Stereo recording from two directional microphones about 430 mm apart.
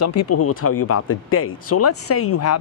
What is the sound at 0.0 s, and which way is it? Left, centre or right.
Speech, left.